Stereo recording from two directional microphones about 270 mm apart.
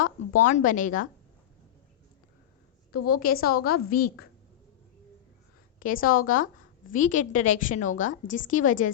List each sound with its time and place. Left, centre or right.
0.4 s a woman's voice: left
2.9 s a woman's voice: left
3.2 s a woman's voice: left
5.8 s a woman's voice: left